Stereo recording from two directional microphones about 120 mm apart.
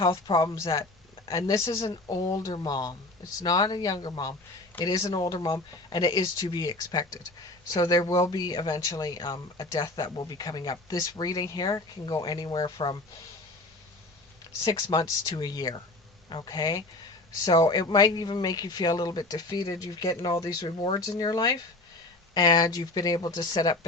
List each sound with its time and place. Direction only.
0.0 s speech: 35° left (ahead or behind)
14.6 s speech: 35° left (ahead or behind)
20.7 s speech: 45° left (ahead or behind)